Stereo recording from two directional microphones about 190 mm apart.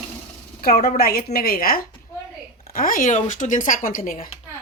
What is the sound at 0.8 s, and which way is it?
Speech, 50° left (ahead or behind).